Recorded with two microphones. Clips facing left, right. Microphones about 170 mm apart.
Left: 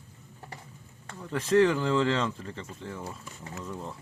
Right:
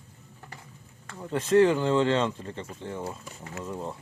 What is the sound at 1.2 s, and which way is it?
Speech, 25° right (ahead or behind).